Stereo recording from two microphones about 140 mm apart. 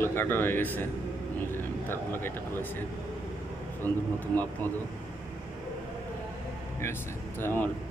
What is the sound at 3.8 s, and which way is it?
Speech, 15° left (ahead or behind).